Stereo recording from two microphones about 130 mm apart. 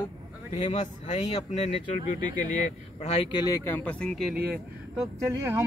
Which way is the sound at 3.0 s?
45° left (ahead or behind).